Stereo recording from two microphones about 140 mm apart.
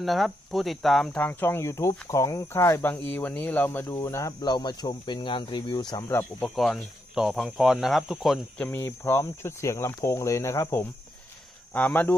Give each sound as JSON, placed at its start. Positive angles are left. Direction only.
{"t": 0.0, "sound": "speech", "side_deg": 0}
{"t": 6.4, "sound": "speech", "side_deg": 0}
{"t": 8.6, "sound": "speech", "side_deg": 15}